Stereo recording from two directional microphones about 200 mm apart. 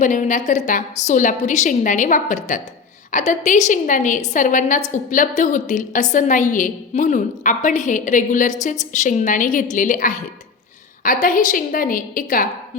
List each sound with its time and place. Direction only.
0.0 s a woman's voice: 40° left (ahead or behind)